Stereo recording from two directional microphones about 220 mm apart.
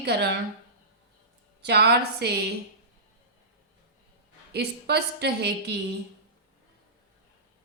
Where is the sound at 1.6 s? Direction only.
50° right (ahead or behind).